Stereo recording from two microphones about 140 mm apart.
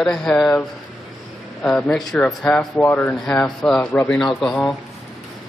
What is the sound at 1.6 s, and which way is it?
Speech, centre (ahead or behind).